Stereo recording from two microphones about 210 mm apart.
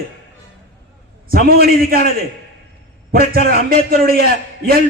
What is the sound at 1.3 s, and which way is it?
A man's voice, 45° right (ahead or behind).